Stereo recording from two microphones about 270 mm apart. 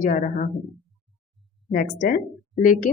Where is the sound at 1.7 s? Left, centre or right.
Left.